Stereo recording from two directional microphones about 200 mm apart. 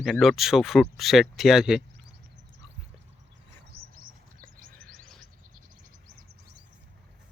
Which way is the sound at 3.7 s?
45° right (ahead or behind).